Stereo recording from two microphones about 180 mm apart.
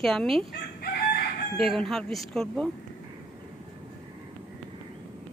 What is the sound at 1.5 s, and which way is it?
A woman's voice, centre (ahead or behind).